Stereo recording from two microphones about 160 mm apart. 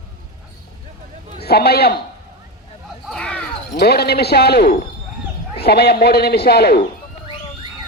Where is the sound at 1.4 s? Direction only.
80° left.